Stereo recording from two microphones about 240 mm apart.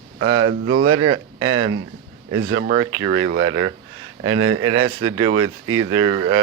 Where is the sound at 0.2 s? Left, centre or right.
Right.